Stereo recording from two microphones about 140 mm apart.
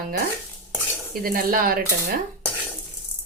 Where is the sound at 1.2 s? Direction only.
90° right.